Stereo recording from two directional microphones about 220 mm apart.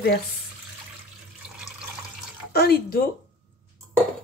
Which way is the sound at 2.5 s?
45° left (ahead or behind).